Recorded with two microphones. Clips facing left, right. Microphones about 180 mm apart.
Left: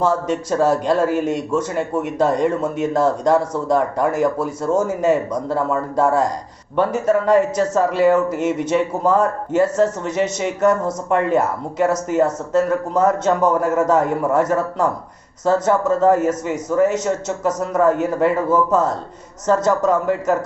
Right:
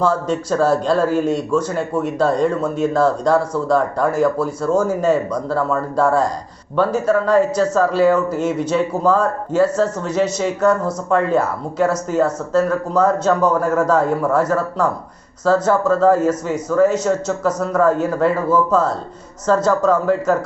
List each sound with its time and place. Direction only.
0.0 s a man's voice: 20° left (ahead or behind)